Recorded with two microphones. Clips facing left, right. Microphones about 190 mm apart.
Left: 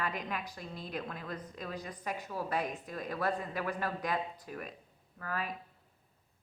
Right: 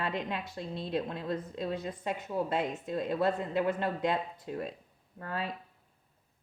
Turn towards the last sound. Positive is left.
turn(degrees=-25)  # may be behind; listen again after turning